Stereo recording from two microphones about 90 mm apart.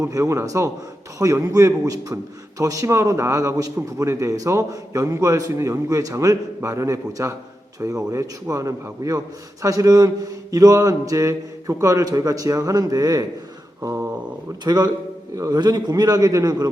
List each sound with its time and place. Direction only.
0.0 s a man's voice: 35° right (ahead or behind)
13.8 s a man's voice: 30° right (ahead or behind)
14.6 s a man's voice: 45° right (ahead or behind)